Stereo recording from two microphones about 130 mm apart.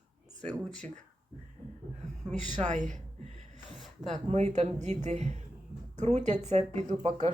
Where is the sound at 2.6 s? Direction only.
70° right (ahead or behind).